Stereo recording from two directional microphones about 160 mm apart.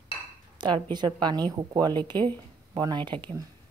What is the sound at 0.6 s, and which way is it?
A woman's voice, 30° right (ahead or behind).